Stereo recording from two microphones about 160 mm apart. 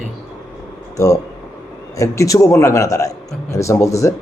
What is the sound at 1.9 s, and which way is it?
A man's voice, 20° left (ahead or behind).